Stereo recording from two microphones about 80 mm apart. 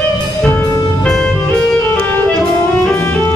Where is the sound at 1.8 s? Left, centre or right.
Left.